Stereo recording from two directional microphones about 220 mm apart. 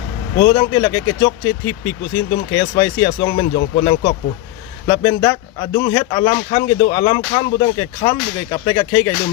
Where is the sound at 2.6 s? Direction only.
20° left (ahead or behind).